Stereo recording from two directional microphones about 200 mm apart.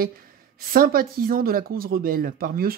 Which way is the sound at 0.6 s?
50° right (ahead or behind).